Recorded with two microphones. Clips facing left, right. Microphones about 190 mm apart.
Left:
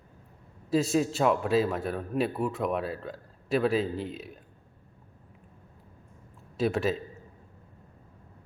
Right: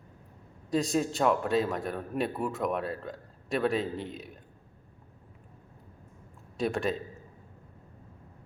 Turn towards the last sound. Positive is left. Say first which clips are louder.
# left 2 dB
turn(degrees=0)  # may be behind; listen again after turning